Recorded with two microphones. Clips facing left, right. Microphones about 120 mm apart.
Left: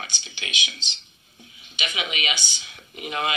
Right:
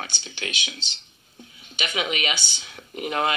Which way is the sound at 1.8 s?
45° right (ahead or behind).